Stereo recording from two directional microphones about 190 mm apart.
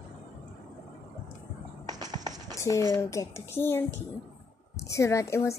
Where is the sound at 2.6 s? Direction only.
15° left (ahead or behind).